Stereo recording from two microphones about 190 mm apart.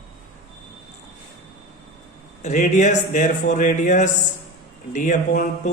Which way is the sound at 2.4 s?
40° left (ahead or behind).